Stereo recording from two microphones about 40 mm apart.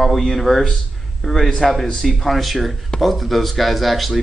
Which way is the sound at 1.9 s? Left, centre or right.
Centre.